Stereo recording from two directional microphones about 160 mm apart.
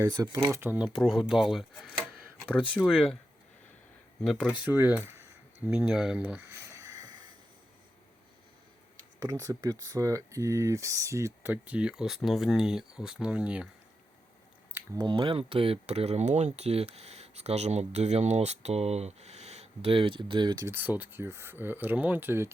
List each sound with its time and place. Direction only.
0.0 s speech: 25° right (ahead or behind)
0.5 s speech: 10° right (ahead or behind)
4.2 s speech: centre (ahead or behind)
6.7 s a sound: 20° right (ahead or behind)
9.2 s speech: 20° right (ahead or behind)
14.9 s speech: 30° right (ahead or behind)
20.7 s speech: 10° right (ahead or behind)